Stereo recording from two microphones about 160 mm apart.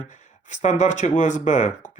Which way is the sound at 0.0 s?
50° left (ahead or behind).